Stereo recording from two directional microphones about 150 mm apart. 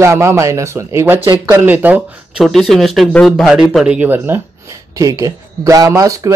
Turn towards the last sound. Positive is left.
turn(degrees=-25)  # may be behind; listen again after turning